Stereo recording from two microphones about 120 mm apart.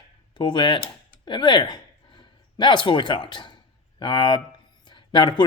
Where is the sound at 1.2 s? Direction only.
40° left (ahead or behind).